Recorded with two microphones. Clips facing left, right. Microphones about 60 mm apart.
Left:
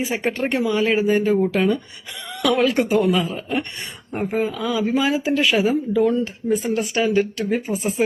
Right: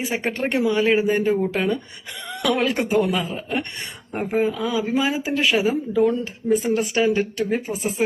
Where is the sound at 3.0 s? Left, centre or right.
Right.